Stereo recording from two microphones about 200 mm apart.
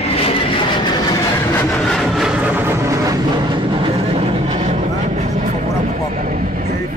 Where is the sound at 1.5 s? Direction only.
15° left (ahead or behind).